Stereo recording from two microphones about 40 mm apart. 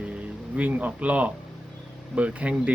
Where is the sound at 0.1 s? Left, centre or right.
Right.